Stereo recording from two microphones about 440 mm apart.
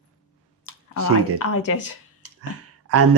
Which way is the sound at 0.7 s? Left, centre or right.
Left.